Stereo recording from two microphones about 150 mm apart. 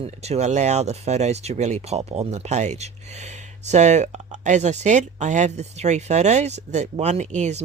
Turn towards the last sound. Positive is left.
turn(degrees=-50)  # may be behind; listen again after turning